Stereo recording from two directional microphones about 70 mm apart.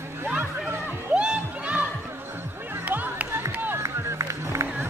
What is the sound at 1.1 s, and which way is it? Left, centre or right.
Music, centre.